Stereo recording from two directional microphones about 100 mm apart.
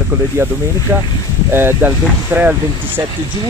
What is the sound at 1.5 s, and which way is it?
Speech, 20° right (ahead or behind).